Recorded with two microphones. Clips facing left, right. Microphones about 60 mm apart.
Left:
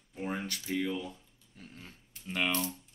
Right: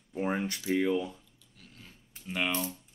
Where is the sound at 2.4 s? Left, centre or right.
Right.